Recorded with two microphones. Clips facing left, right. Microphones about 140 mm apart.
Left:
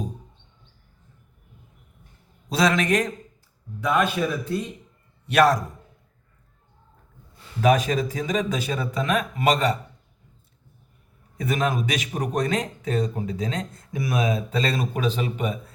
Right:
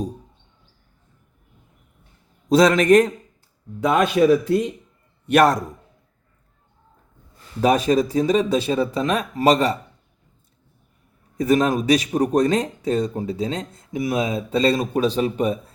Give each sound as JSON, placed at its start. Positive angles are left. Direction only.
{"t": 2.5, "sound": "a man's voice", "side_deg": -45}
{"t": 3.8, "sound": "a man's voice", "side_deg": -80}
{"t": 5.2, "sound": "a man's voice", "side_deg": -50}
{"t": 7.6, "sound": "speech", "side_deg": -35}
{"t": 11.3, "sound": "speech", "side_deg": -40}